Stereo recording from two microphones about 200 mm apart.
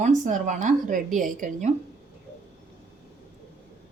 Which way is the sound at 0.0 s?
40° right (ahead or behind).